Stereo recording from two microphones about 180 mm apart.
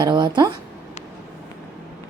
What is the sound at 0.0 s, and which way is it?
Speech, 25° right (ahead or behind).